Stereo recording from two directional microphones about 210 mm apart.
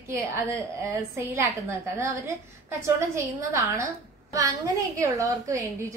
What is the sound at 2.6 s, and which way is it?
A woman's voice, 15° right (ahead or behind).